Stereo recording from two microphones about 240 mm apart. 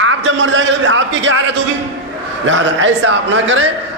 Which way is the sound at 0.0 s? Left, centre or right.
Right.